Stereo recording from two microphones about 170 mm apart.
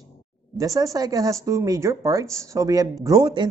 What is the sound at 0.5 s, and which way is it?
Speech, 20° right (ahead or behind).